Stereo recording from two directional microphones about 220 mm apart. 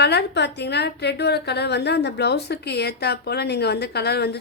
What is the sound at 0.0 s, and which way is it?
A woman's voice, 50° left (ahead or behind).